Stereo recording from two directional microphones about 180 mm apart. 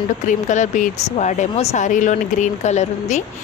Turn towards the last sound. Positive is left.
turn(degrees=40)  # may be behind; listen again after turning